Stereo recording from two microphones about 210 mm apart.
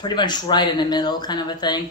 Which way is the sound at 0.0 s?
20° left (ahead or behind).